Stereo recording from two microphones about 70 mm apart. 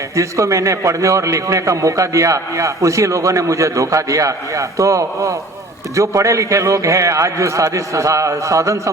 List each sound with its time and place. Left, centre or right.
0.2 s a man's voice: right